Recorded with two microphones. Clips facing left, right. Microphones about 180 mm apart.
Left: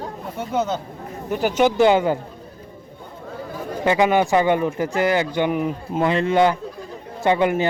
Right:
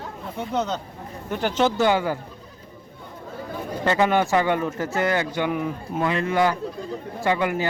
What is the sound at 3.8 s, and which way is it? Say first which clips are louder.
Speech: left 3 dB; 15° left (ahead or behind).